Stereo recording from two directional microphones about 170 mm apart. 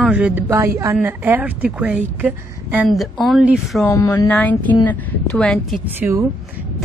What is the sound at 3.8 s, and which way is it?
Speech, 20° left (ahead or behind).